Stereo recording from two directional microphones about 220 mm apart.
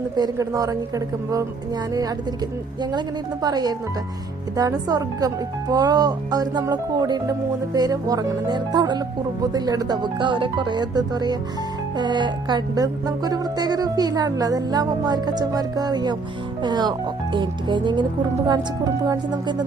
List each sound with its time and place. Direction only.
0.2 s music: 15° right (ahead or behind)
3.4 s music: 20° right (ahead or behind)